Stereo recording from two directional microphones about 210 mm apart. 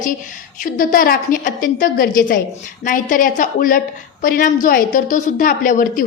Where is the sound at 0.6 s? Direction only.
40° left (ahead or behind).